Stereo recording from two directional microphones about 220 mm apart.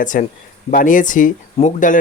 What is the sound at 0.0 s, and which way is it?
Speech, 35° left (ahead or behind).